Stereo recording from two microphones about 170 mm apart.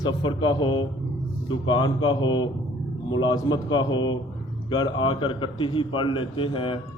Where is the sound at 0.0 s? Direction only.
25° left (ahead or behind).